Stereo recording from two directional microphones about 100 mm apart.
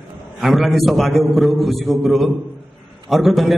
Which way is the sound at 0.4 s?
Centre (ahead or behind).